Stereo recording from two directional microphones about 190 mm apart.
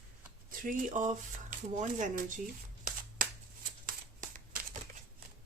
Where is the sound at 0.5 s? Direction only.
45° right (ahead or behind).